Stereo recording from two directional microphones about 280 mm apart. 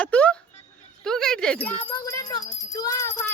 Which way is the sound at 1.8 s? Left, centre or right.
Centre.